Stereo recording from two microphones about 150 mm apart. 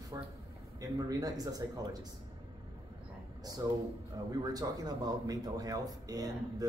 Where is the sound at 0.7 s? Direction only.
25° right (ahead or behind).